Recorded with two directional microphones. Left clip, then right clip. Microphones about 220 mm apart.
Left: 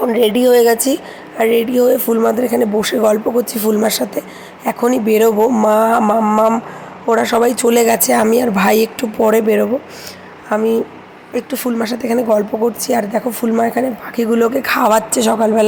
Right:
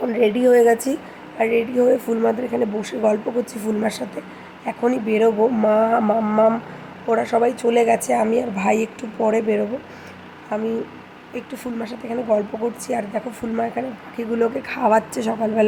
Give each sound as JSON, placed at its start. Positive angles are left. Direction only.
{"t": 0.0, "sound": "speech", "side_deg": 15}
{"t": 7.1, "sound": "speech", "side_deg": 15}
{"t": 11.3, "sound": "speech", "side_deg": 15}